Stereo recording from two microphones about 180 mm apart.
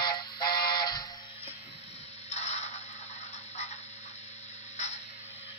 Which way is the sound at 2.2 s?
35° left (ahead or behind).